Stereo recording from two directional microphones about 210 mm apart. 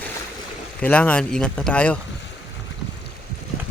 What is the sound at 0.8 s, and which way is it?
Speech, 5° left (ahead or behind).